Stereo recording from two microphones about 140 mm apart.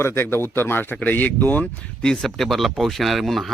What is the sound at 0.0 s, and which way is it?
A man's voice, 15° left (ahead or behind).